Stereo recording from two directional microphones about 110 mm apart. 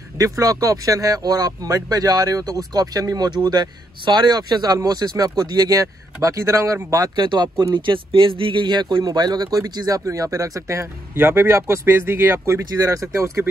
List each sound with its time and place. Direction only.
0.2 s speech: 30° right (ahead or behind)